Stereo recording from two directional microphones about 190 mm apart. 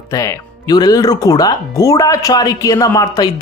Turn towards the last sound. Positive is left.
turn(degrees=20)  # may be behind; listen again after turning